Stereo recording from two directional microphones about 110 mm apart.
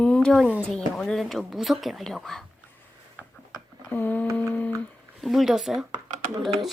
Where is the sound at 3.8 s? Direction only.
15° left (ahead or behind).